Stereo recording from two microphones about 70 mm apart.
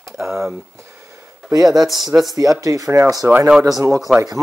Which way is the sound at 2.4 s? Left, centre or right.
Right.